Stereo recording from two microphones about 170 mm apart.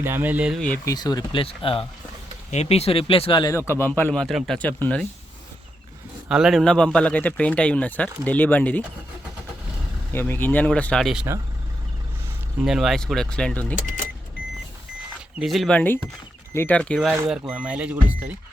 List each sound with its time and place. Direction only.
0.0 s speech: 10° right (ahead or behind)
0.9 s speech: 25° left (ahead or behind)
3.5 s speech: 15° left (ahead or behind)
6.2 s speech: 5° right (ahead or behind)
10.1 s speech: 10° left (ahead or behind)
12.6 s speech: centre (ahead or behind)
15.4 s speech: centre (ahead or behind)
17.2 s speech: 5° right (ahead or behind)